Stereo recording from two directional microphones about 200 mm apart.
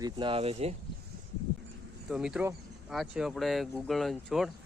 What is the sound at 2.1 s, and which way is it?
Speech, 5° right (ahead or behind).